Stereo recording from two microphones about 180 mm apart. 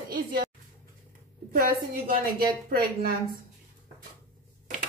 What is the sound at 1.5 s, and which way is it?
Speech, 55° right (ahead or behind).